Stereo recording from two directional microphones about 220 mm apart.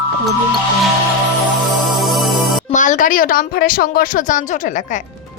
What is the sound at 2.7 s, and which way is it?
A woman's voice, 35° left (ahead or behind).